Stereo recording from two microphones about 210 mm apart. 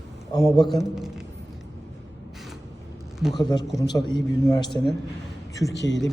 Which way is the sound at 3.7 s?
20° left (ahead or behind).